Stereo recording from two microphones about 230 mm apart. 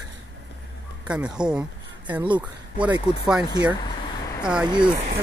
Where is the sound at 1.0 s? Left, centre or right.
Centre.